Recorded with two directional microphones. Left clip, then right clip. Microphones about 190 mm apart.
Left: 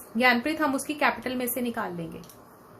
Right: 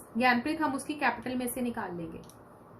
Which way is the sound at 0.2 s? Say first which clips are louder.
Left 4 dB; 50° left (ahead or behind).